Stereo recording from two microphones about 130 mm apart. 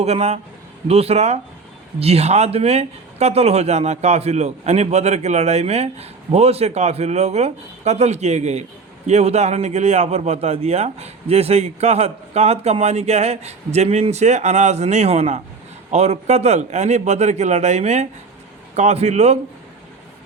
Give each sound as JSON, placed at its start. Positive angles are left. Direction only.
{"t": 0.0, "sound": "speech", "side_deg": -55}